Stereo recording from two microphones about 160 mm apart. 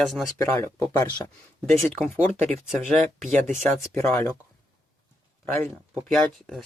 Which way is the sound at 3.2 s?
50° right (ahead or behind).